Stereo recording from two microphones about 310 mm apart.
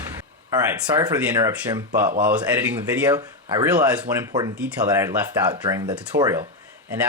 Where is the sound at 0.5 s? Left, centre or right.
Centre.